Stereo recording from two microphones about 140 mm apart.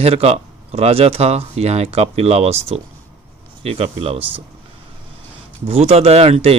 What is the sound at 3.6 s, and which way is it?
Speech, 45° right (ahead or behind).